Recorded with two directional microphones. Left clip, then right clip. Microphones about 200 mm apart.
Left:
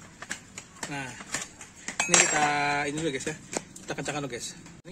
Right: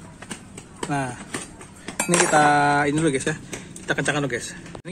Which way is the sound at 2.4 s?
15° right (ahead or behind).